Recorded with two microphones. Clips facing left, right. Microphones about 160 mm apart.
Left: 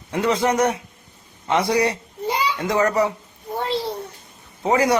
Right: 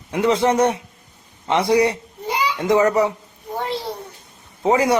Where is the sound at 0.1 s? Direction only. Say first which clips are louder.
Right 3 dB; 20° right (ahead or behind).